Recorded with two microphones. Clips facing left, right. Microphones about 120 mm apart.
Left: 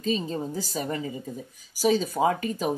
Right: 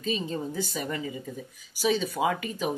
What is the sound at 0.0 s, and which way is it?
Speech, 35° left (ahead or behind).